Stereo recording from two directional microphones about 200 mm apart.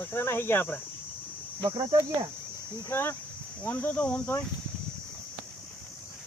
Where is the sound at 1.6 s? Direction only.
25° right (ahead or behind).